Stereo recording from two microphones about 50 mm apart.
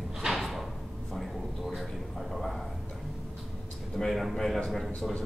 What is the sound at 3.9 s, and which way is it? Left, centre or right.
Speech, centre.